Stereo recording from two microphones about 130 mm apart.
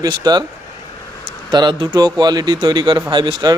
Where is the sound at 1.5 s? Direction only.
35° right (ahead or behind).